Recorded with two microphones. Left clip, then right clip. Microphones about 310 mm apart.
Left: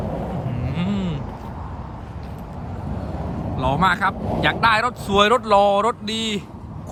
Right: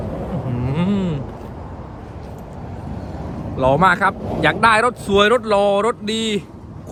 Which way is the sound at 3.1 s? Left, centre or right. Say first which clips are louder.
Left 1 dB; centre.